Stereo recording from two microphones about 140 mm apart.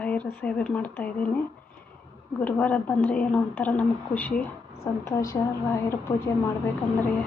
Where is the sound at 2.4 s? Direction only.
10° left (ahead or behind).